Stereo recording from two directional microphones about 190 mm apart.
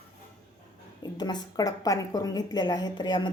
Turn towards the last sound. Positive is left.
turn(degrees=25)  # may be behind; listen again after turning